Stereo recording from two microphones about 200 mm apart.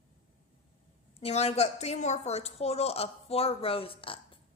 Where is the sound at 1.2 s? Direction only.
35° left (ahead or behind).